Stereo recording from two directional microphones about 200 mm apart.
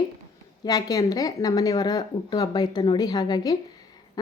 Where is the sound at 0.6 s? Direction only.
20° left (ahead or behind).